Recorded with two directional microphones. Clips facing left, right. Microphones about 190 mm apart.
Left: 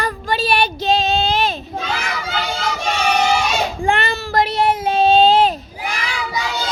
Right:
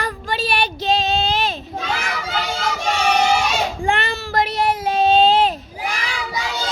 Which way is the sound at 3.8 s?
45° left (ahead or behind).